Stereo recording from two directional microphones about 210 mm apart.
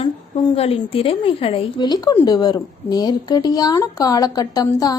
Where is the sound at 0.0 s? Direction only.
25° left (ahead or behind).